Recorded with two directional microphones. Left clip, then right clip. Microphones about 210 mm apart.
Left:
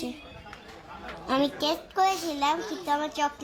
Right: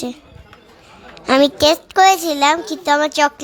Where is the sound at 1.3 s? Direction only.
30° right (ahead or behind).